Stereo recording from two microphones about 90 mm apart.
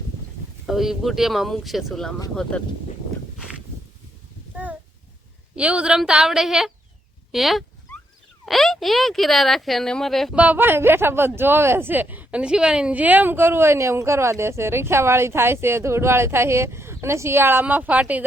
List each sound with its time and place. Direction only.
0.7 s speech: 5° right (ahead or behind)
4.5 s a sound: 20° right (ahead or behind)
5.5 s a woman's voice: 15° right (ahead or behind); by 10.3 s 5° left (ahead or behind)
10.3 s speech: 15° right (ahead or behind)